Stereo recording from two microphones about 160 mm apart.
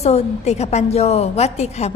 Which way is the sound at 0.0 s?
40° left (ahead or behind).